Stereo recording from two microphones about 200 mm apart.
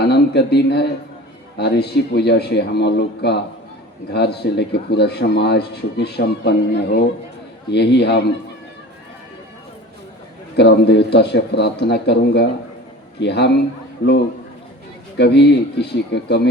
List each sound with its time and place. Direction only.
0.0 s speech: 55° left (ahead or behind)
10.6 s speech: 55° left (ahead or behind)
15.2 s speech: 60° left (ahead or behind)